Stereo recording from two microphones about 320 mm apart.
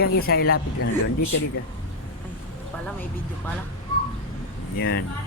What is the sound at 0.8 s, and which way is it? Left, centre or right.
Speech, left.